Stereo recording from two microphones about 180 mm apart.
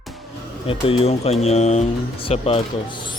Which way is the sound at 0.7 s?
30° left (ahead or behind).